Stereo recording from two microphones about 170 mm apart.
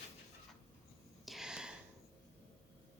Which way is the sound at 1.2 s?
Centre (ahead or behind).